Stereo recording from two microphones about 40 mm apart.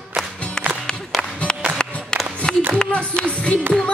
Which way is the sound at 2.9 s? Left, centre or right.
Left.